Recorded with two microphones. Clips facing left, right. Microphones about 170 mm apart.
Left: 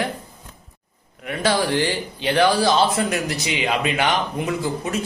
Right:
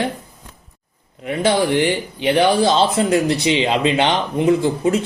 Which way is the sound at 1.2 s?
20° right (ahead or behind).